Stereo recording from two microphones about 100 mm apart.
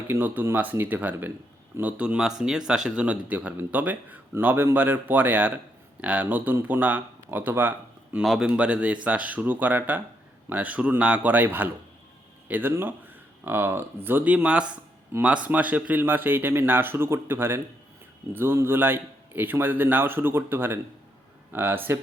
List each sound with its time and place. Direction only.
0.1 s a man's voice: 20° right (ahead or behind)
8.2 s speech: centre (ahead or behind)
8.4 s a man's voice: 10° right (ahead or behind)
15.1 s a man's voice: 25° right (ahead or behind)